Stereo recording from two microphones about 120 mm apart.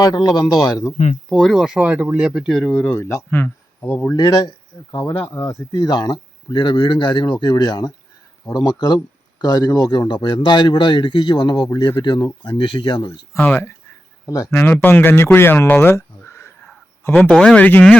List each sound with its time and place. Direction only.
0.0 s a man's voice: 30° left (ahead or behind)
1.3 s speech: centre (ahead or behind)
3.0 s speech: 25° left (ahead or behind)
4.2 s a man's voice: 35° left (ahead or behind)
5.2 s speech: 20° left (ahead or behind)
5.7 s a man's voice: 35° left (ahead or behind)
13.4 s speech: 15° left (ahead or behind)
14.3 s speech: 30° left (ahead or behind)
14.6 s speech: 15° left (ahead or behind)
17.2 s speech: 5° left (ahead or behind)